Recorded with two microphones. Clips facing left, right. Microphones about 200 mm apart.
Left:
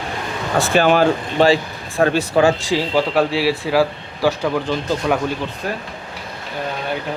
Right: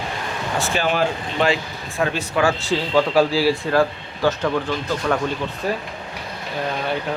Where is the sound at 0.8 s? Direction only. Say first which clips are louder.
Left 8 dB; 60° left (ahead or behind).